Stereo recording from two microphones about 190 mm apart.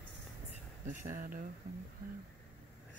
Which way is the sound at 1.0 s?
45° right (ahead or behind).